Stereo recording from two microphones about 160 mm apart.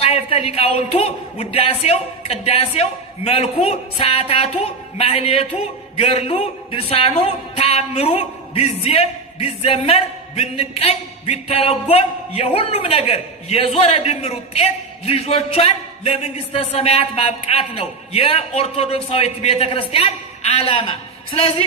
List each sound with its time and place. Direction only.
0.0 s speech: 40° left (ahead or behind)